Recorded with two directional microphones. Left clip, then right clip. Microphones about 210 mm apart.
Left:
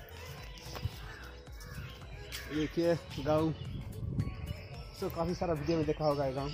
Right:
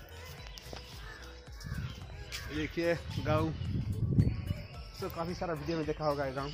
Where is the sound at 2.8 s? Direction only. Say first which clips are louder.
Left 1 dB; 20° right (ahead or behind).